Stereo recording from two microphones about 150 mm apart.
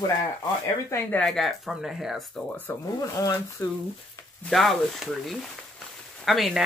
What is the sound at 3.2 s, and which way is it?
Speech, 25° left (ahead or behind).